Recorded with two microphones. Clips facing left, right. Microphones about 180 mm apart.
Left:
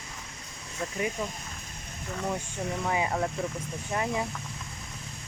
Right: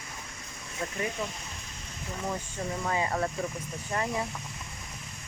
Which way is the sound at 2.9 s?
10° left (ahead or behind).